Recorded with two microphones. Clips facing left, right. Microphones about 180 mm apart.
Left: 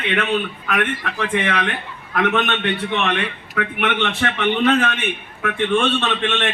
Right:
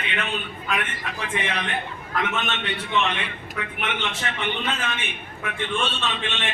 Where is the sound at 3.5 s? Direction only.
65° left (ahead or behind).